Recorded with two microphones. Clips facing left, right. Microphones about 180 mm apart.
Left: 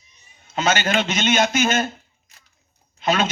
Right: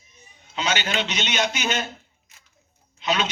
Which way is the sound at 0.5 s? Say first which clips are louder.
Left 5 dB; 45° left (ahead or behind).